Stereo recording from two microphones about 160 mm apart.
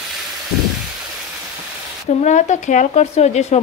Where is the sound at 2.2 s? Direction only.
50° left (ahead or behind).